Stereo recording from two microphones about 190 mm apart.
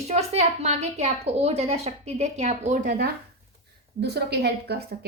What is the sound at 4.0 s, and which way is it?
Speech, 60° right (ahead or behind).